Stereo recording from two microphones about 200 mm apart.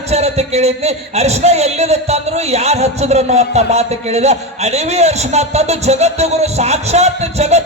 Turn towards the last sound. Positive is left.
turn(degrees=-35)  # may be behind; listen again after turning